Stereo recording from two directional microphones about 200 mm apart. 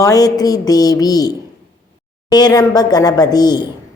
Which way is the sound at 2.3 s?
20° left (ahead or behind).